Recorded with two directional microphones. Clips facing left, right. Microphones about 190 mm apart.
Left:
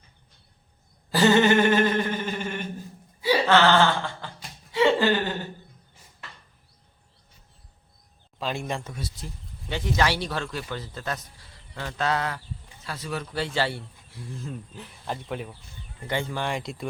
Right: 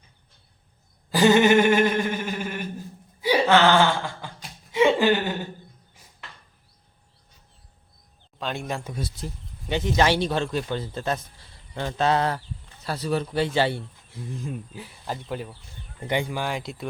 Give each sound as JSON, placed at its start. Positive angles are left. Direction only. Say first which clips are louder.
{"t": 1.1, "sound": "a sound", "louder": "right 2 dB", "side_deg": -15}
{"t": 3.2, "sound": "laughter", "louder": "right 1 dB", "side_deg": -15}
{"t": 8.4, "sound": "speech", "louder": "even", "side_deg": 0}
{"t": 9.6, "sound": "a man's voice", "louder": "right 4 dB", "side_deg": -20}
{"t": 13.3, "sound": "speech", "louder": "right 2 dB", "side_deg": -20}
{"t": 16.0, "sound": "speech", "louder": "right 2 dB", "side_deg": -15}